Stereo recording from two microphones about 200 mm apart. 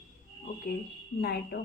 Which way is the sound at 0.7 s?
50° left (ahead or behind).